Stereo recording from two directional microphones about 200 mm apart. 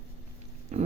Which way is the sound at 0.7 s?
35° right (ahead or behind).